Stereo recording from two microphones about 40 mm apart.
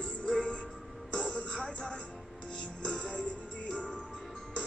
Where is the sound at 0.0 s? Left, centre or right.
Left.